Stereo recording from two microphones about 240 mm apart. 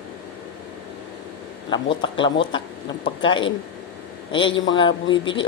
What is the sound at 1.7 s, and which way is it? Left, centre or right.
Speech, centre.